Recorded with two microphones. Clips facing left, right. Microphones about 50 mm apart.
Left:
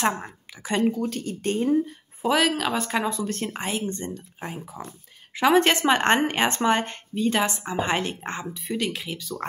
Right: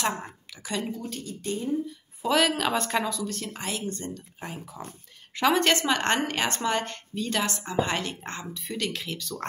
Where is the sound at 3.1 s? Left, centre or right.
Left.